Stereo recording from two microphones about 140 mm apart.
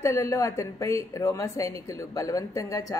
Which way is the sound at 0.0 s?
20° left (ahead or behind).